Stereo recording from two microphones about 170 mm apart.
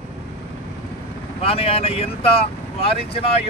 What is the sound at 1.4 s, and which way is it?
Speech, 35° left (ahead or behind).